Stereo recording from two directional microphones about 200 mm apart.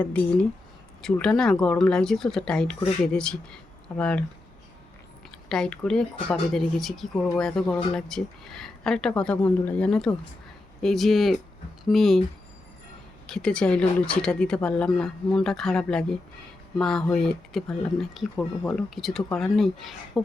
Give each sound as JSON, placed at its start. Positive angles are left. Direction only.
{"t": 0.0, "sound": "speech", "side_deg": 5}
{"t": 5.5, "sound": "speech", "side_deg": 5}
{"t": 13.2, "sound": "speech", "side_deg": 5}